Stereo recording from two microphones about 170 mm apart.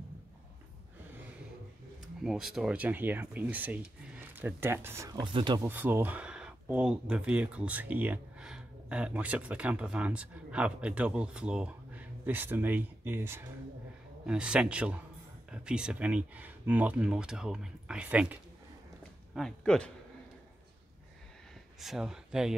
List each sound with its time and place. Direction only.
2.2 s speech: centre (ahead or behind); by 5.6 s 30° right (ahead or behind)
5.6 s speech: 10° right (ahead or behind)
19.3 s speech: 5° left (ahead or behind)
21.7 s speech: centre (ahead or behind)